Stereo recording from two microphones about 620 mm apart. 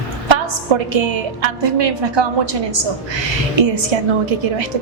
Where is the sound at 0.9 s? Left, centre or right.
Right.